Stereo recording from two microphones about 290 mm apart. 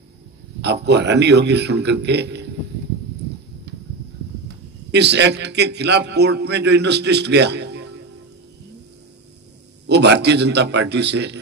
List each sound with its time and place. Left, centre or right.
0.6 s a man's voice: right
4.9 s a man's voice: right
9.8 s a man's voice: right